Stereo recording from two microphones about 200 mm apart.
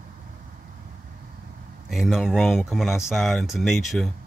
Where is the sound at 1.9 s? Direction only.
Centre (ahead or behind).